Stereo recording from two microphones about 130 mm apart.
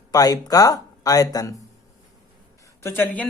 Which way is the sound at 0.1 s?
30° left (ahead or behind).